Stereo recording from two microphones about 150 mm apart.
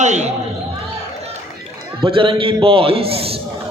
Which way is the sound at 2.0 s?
35° right (ahead or behind).